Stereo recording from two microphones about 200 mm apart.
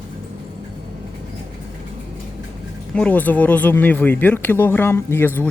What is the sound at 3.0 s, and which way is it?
Speech, 10° left (ahead or behind).